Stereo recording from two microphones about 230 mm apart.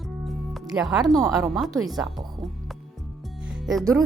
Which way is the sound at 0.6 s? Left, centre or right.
Centre.